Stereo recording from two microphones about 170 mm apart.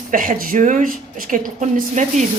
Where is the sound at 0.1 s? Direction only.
55° right (ahead or behind).